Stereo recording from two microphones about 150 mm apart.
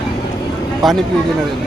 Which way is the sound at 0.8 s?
Centre (ahead or behind).